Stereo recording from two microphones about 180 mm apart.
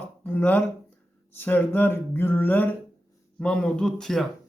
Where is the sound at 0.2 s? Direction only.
10° left (ahead or behind).